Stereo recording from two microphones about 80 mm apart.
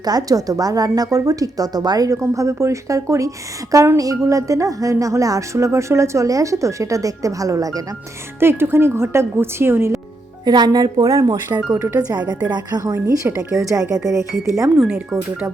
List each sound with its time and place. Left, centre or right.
0.0 s speech: right
2.2 s speech: right
8.4 s a woman's voice: right
10.4 s speech: right
11.4 s a woman's voice: right
12.5 s speech: right
12.8 s a woman's voice: right